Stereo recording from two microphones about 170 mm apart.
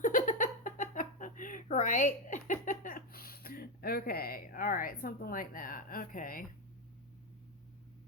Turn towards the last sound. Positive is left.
turn(degrees=55)  # may be behind; listen again after turning